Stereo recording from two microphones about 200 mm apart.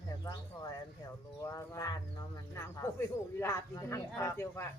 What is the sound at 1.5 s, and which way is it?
Wild animals, 15° left (ahead or behind).